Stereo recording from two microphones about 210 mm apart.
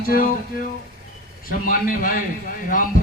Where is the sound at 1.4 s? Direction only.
40° left (ahead or behind).